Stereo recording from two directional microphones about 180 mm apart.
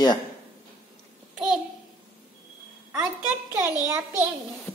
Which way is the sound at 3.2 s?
10° right (ahead or behind).